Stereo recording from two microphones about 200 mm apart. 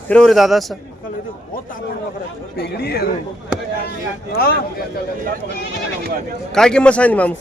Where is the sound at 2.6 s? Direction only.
55° left (ahead or behind).